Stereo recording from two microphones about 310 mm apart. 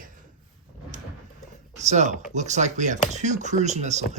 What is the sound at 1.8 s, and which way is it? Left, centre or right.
Speech, right.